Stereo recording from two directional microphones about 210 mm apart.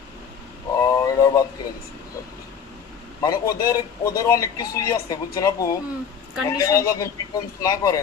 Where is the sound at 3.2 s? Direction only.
15° left (ahead or behind).